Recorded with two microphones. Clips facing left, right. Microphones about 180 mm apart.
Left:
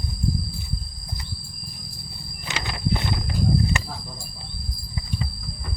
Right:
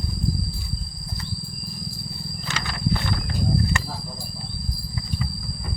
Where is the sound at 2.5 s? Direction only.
20° left (ahead or behind).